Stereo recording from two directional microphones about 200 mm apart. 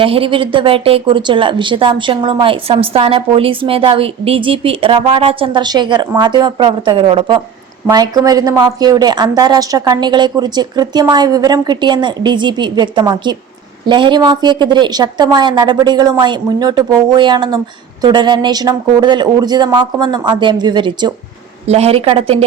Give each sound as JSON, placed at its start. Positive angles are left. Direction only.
{"t": 0.0, "sound": "speech", "side_deg": -25}